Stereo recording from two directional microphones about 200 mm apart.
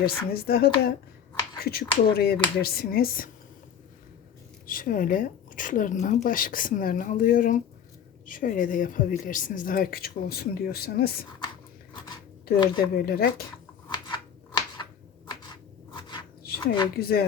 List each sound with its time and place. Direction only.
0.0 s speech: 50° left (ahead or behind)
4.6 s speech: 45° left (ahead or behind)
13.0 s speech: 50° left (ahead or behind)
13.8 s scissors: 25° left (ahead or behind)
16.6 s a woman's voice: 20° left (ahead or behind)
16.9 s speech: 50° left (ahead or behind)